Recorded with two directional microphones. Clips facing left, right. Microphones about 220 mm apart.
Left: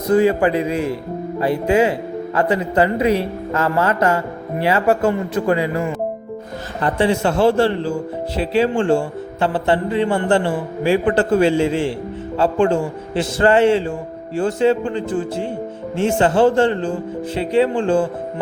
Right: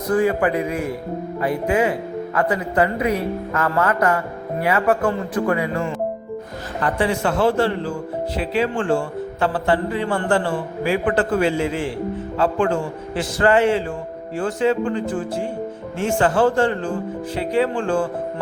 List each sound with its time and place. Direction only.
0.1 s a man's voice: 25° left (ahead or behind)
6.8 s a man's voice: 25° left (ahead or behind)